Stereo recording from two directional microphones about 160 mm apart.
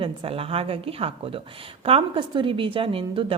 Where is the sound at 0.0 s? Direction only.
35° right (ahead or behind).